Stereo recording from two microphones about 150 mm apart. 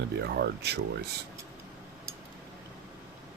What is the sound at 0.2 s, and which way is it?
Speech, 90° right.